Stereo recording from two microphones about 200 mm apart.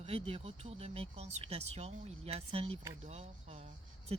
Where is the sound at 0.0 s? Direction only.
30° right (ahead or behind).